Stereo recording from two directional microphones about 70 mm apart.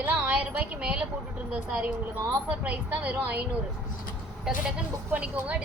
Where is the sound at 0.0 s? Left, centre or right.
Centre.